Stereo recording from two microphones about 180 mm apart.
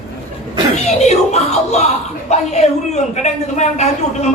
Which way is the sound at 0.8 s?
40° left (ahead or behind).